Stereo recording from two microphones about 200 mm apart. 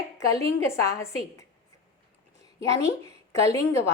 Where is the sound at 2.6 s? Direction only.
15° left (ahead or behind).